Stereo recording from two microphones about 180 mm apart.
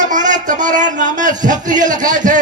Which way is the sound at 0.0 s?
45° right (ahead or behind).